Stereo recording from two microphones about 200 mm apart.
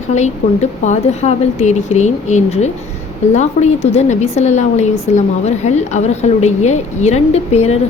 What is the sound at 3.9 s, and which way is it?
A woman's voice, 35° left (ahead or behind).